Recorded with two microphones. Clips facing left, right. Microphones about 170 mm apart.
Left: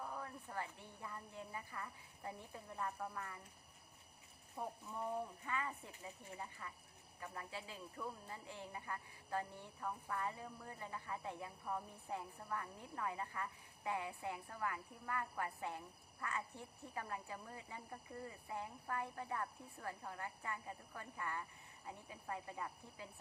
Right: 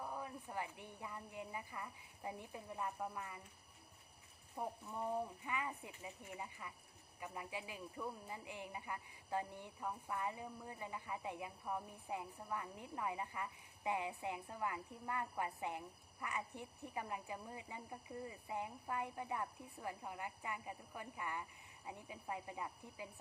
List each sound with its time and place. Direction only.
0.0 s speech: 15° right (ahead or behind)
4.5 s speech: 15° right (ahead or behind)